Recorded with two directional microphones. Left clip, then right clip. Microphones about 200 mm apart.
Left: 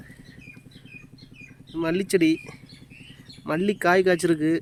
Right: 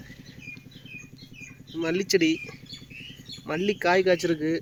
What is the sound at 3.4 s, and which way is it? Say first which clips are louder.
Speech: left 2 dB; 35° left (ahead or behind).